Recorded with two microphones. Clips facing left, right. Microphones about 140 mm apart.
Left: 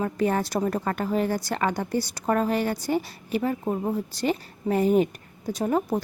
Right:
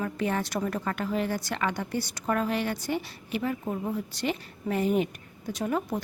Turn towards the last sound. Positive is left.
turn(degrees=35)  # may be behind; listen again after turning